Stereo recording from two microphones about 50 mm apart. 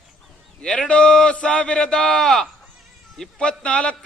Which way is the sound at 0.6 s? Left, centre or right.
Centre.